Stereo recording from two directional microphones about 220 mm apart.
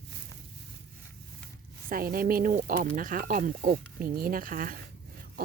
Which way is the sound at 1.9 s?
40° right (ahead or behind).